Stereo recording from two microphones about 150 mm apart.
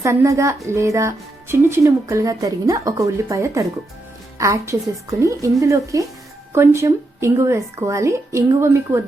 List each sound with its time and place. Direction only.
0.0 s a woman's voice: 20° right (ahead or behind)